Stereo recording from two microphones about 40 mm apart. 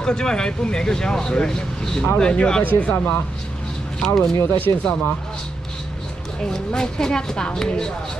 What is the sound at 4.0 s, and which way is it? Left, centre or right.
Speech, centre.